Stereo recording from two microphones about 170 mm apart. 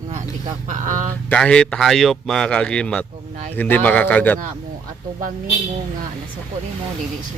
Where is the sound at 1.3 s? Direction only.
5° left (ahead or behind).